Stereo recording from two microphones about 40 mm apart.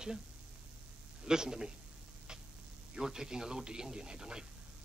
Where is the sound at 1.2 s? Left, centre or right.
Centre.